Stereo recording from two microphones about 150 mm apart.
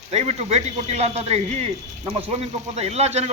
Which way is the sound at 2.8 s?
45° right (ahead or behind).